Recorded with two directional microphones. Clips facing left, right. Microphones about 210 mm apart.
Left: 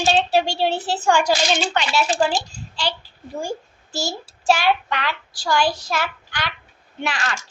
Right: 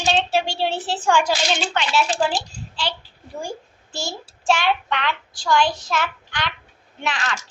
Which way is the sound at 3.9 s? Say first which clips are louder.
Left 3 dB; 40° left (ahead or behind).